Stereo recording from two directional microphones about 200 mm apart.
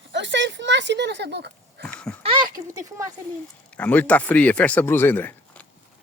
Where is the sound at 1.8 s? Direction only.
5° left (ahead or behind).